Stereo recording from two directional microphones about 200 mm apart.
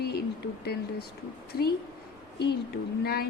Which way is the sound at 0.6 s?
55° left (ahead or behind).